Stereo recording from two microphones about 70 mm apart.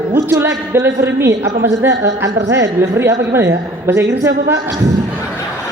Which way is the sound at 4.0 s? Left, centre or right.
Right.